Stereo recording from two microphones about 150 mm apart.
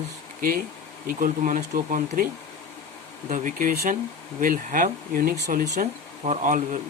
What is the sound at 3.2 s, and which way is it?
Speech, 60° right (ahead or behind).